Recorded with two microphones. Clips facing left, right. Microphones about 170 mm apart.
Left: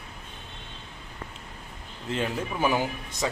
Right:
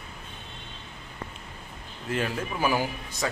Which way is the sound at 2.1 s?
20° left (ahead or behind).